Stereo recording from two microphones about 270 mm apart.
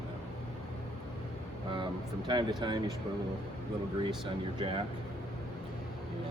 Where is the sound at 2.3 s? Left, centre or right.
Centre.